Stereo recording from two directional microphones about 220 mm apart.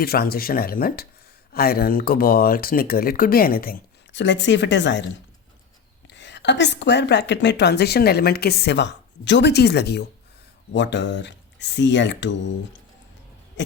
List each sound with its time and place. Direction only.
0.0 s a woman's voice: 45° left (ahead or behind)
6.1 s a woman's voice: 50° left (ahead or behind)
13.6 s a sound: 55° left (ahead or behind)